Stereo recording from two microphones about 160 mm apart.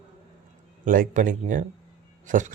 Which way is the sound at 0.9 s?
55° right (ahead or behind).